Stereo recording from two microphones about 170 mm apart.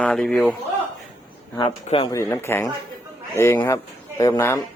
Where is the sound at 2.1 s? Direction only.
15° left (ahead or behind).